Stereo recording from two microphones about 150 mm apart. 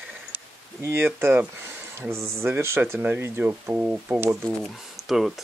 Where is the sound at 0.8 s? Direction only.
15° right (ahead or behind).